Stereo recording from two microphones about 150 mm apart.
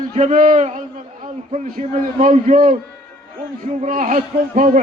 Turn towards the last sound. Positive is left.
turn(degrees=-55)  # may be behind; listen again after turning